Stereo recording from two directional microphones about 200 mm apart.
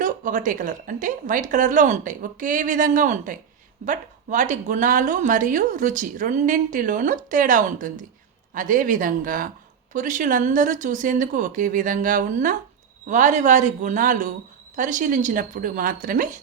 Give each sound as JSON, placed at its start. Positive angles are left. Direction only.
{"t": 0.0, "sound": "a woman's voice", "side_deg": -40}